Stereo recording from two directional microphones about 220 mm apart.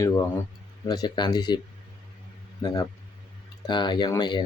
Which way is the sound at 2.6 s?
20° left (ahead or behind).